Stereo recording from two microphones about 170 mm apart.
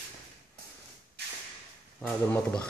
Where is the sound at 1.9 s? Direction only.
10° left (ahead or behind).